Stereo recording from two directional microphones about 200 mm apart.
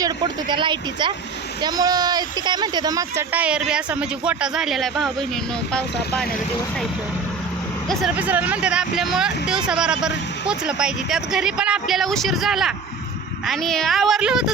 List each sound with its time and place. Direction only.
0.0 s speech: 25° right (ahead or behind); by 5.1 s centre (ahead or behind)
8.0 s speech: 10° right (ahead or behind)